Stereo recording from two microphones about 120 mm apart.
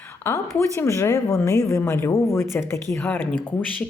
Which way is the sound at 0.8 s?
25° left (ahead or behind).